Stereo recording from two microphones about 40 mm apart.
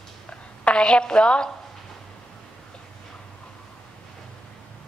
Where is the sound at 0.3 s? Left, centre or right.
Left.